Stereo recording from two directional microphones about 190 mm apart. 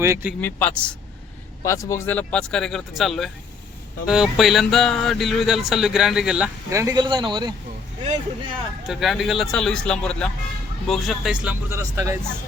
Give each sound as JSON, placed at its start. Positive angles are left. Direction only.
{"t": 0.0, "sound": "speech", "side_deg": -10}
{"t": 0.4, "sound": "a man's voice", "side_deg": 5}
{"t": 6.7, "sound": "speech", "side_deg": -15}
{"t": 8.9, "sound": "speech", "side_deg": 0}